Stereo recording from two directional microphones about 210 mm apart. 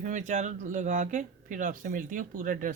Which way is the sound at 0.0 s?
35° right (ahead or behind).